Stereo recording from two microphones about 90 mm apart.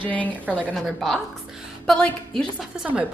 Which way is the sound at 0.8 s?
Centre (ahead or behind).